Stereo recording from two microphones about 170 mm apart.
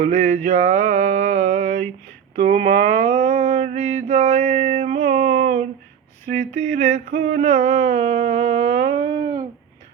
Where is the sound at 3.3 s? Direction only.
45° right (ahead or behind); by 9.1 s 30° right (ahead or behind).